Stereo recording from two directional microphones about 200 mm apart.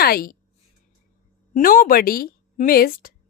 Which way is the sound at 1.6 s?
45° left (ahead or behind).